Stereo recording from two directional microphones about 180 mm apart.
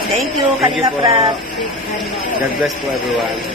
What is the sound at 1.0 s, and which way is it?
Speech, 30° right (ahead or behind).